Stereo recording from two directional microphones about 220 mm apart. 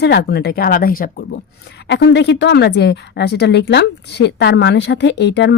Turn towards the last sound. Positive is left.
turn(degrees=50)  # may be behind; listen again after turning